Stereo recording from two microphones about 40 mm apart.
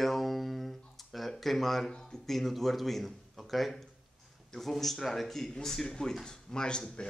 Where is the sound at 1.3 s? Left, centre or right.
Centre.